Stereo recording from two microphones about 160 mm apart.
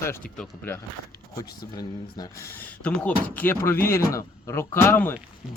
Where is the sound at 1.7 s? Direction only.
25° left (ahead or behind).